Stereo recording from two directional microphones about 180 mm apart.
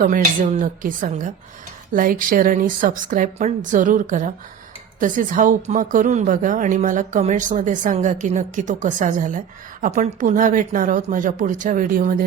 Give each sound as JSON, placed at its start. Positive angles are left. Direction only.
{"t": 0.0, "sound": "a woman's voice", "side_deg": -50}